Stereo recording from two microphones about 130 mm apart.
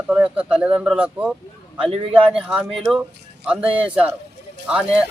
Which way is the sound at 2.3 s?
5° right (ahead or behind).